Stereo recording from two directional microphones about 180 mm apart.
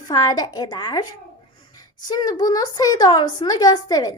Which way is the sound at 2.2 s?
20° left (ahead or behind).